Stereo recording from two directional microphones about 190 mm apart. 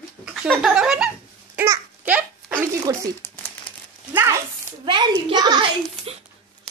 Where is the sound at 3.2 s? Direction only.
10° left (ahead or behind).